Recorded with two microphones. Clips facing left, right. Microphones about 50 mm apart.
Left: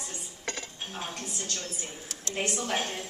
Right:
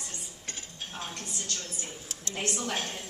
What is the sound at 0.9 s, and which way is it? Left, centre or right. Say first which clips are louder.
Speech: left 2 dB; centre.